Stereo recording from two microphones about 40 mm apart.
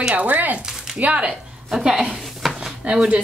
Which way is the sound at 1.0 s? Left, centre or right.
Right.